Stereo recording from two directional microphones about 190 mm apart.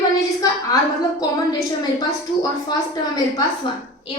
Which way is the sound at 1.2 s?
20° left (ahead or behind).